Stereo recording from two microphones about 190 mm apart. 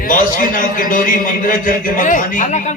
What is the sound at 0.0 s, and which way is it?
A man's voice, 45° left (ahead or behind).